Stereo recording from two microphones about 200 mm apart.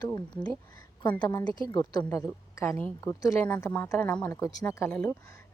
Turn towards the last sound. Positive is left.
turn(degrees=10)  # may be behind; listen again after turning